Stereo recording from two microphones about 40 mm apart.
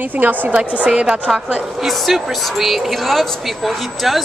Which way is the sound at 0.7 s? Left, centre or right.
Right.